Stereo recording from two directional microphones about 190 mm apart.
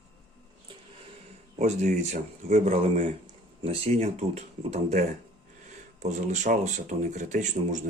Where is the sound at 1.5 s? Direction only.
40° right (ahead or behind).